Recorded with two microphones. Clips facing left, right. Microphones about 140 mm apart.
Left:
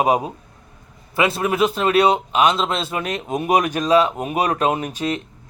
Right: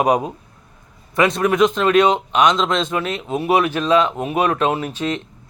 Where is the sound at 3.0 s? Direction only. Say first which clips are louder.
Right 1 dB; 45° left (ahead or behind).